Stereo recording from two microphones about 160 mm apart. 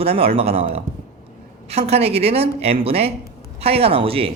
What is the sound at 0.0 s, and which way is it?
Speech, 40° right (ahead or behind).